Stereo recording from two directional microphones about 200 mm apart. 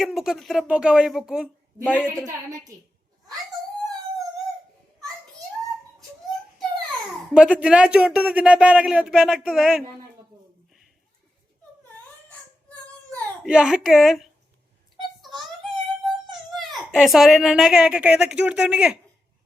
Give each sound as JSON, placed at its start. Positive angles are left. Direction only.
{"t": 0.0, "sound": "speech", "side_deg": 0}
{"t": 2.2, "sound": "a woman's voice", "side_deg": -15}
{"t": 7.3, "sound": "speech", "side_deg": -5}
{"t": 13.4, "sound": "speech", "side_deg": -5}
{"t": 15.2, "sound": "a sound", "side_deg": 0}
{"t": 16.6, "sound": "speech", "side_deg": 0}